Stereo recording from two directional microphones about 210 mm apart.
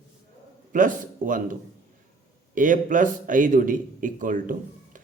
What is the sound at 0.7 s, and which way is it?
Speech, 40° right (ahead or behind).